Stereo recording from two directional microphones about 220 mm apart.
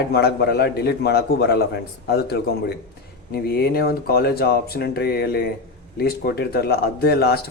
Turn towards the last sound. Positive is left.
turn(degrees=45)  # may be behind; listen again after turning